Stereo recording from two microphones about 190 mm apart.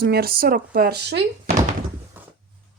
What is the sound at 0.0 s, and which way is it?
Speech, 55° right (ahead or behind).